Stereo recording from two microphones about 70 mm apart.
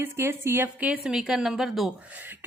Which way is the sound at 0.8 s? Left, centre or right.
Centre.